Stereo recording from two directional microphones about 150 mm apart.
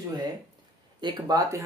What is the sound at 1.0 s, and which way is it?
Speech, 30° right (ahead or behind).